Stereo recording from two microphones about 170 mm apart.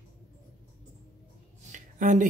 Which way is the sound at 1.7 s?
45° right (ahead or behind).